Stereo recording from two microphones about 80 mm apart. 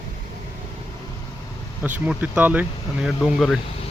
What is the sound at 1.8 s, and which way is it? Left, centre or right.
Speech, centre.